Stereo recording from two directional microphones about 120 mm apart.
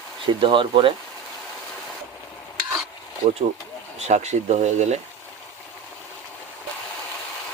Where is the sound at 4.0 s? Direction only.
70° right (ahead or behind).